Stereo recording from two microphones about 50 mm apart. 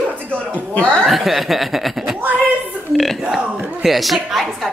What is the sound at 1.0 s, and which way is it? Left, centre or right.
Speech, centre.